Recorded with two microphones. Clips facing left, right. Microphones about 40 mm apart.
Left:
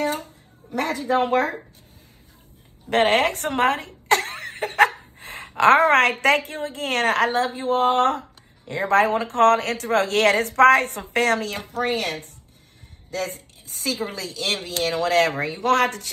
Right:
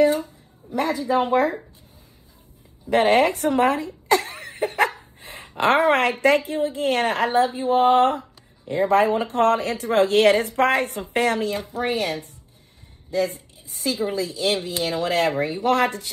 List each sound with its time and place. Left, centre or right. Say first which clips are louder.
0.0 s speech: right 7 dB; left
2.9 s speech: right 1 dB; left